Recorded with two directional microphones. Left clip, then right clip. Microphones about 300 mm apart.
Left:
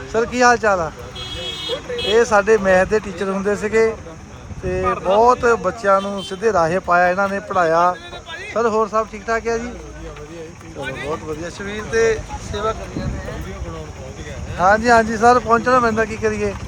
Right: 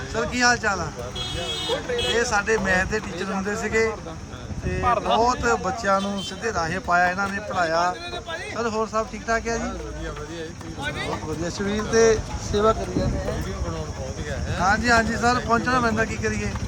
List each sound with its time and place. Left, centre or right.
0.1 s speech: centre
1.4 s vehicle: right
2.1 s speech: centre
5.1 s speech: centre
10.8 s speech: right
11.4 s speech: centre
14.6 s speech: centre